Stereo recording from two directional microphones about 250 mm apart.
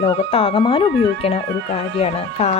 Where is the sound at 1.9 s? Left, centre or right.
Left.